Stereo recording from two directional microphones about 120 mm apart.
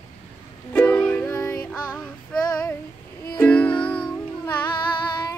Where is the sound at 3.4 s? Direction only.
10° left (ahead or behind).